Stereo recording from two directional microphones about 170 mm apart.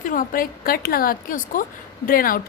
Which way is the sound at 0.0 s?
55° left (ahead or behind).